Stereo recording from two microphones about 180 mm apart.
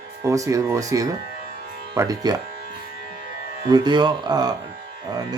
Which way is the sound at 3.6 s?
25° right (ahead or behind).